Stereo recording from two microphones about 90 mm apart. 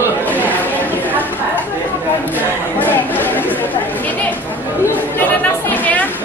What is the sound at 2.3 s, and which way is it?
Chatter, 20° left (ahead or behind).